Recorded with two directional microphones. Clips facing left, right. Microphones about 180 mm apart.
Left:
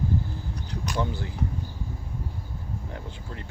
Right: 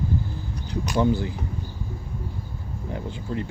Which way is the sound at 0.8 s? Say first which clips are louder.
Right 7 dB; 10° right (ahead or behind).